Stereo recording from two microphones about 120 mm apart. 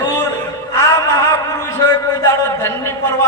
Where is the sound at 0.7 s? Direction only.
25° left (ahead or behind).